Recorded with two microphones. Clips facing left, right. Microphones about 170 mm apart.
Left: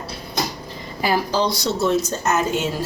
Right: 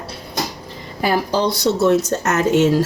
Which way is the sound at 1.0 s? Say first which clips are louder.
Right 2 dB; 60° right (ahead or behind).